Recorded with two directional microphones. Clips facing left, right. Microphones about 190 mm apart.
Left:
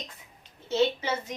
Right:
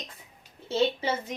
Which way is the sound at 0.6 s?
30° right (ahead or behind).